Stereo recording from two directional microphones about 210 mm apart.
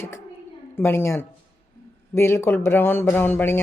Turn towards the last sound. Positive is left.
turn(degrees=10)  # may be behind; listen again after turning